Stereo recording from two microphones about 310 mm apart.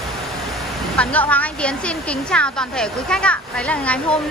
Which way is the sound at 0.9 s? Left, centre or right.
Centre.